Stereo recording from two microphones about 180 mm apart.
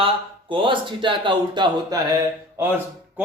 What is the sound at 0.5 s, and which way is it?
Speech, 25° right (ahead or behind).